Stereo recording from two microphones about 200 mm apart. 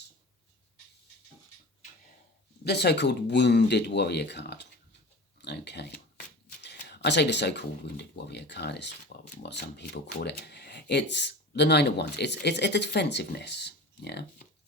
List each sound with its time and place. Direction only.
2.6 s speech: 55° left (ahead or behind)
5.4 s a sound: 55° left (ahead or behind)
6.6 s speech: 55° left (ahead or behind)